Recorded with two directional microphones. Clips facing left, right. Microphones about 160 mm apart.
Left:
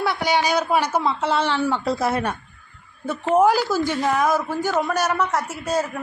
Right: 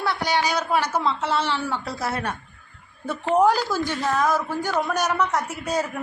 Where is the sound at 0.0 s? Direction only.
10° left (ahead or behind).